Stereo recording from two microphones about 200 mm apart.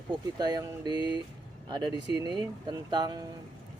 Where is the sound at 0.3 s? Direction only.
20° right (ahead or behind).